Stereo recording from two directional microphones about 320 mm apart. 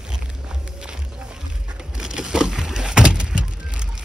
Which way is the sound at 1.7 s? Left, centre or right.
Centre.